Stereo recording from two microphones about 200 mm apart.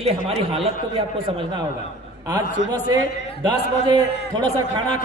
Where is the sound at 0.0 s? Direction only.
30° right (ahead or behind).